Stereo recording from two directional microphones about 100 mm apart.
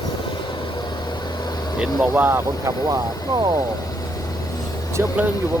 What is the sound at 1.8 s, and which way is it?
Speech, 15° right (ahead or behind).